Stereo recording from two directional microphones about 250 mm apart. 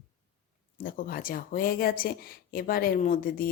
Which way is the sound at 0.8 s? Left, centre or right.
Left.